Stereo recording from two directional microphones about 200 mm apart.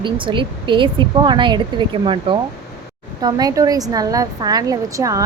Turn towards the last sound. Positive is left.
turn(degrees=-15)  # may be behind; listen again after turning